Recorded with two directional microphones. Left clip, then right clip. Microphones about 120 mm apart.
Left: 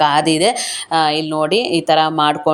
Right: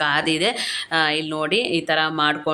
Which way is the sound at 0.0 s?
35° left (ahead or behind).